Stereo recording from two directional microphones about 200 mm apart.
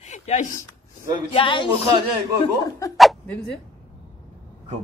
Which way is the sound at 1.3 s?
25° left (ahead or behind).